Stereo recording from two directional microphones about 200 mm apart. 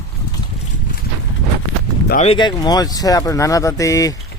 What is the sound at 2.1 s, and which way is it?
Speech, 30° left (ahead or behind).